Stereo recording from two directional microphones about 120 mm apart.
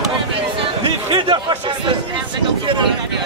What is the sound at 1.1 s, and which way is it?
Chatter, 40° right (ahead or behind).